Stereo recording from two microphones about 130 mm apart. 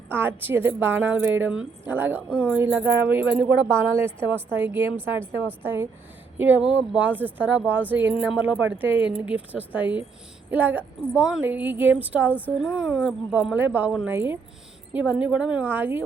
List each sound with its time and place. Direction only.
0.1 s speech: 15° right (ahead or behind)